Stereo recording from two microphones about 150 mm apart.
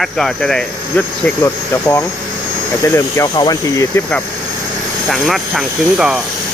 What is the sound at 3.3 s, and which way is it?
Speech, 25° left (ahead or behind).